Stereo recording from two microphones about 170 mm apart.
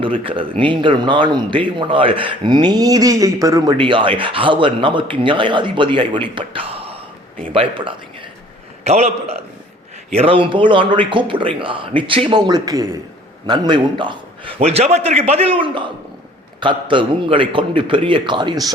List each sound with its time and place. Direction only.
0.0 s a man's voice: 30° right (ahead or behind)
6.3 s a sound: 30° right (ahead or behind)
7.5 s a man's voice: 30° right (ahead or behind)